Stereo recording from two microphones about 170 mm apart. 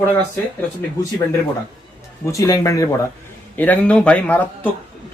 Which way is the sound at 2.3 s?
20° left (ahead or behind).